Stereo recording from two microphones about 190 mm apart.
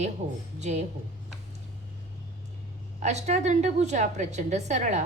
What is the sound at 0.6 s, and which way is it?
Speech, 35° right (ahead or behind).